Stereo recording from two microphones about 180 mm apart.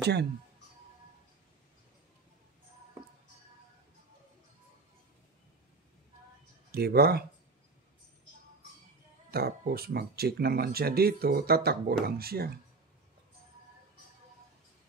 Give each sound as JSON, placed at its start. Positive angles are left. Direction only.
{"t": 0.0, "sound": "speech", "side_deg": -65}
{"t": 6.7, "sound": "speech", "side_deg": -60}
{"t": 9.3, "sound": "speech", "side_deg": -60}